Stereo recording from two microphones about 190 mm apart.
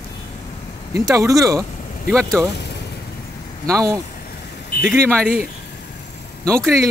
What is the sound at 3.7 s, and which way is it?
Speech, 15° right (ahead or behind).